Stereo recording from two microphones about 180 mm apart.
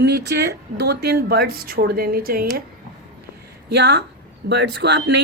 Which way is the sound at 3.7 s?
70° right (ahead or behind).